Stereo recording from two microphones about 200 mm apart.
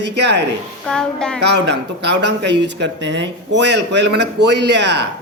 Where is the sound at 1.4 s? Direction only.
60° right (ahead or behind).